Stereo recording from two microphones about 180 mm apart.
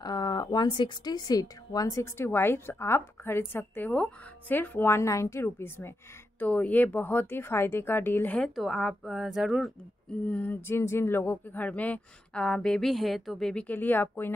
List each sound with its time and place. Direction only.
0.0 s speech: 20° left (ahead or behind); by 9.7 s 5° right (ahead or behind)
10.2 s speech: 10° left (ahead or behind)